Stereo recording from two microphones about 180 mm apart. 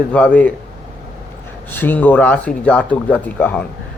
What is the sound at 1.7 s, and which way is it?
Speech, 10° left (ahead or behind).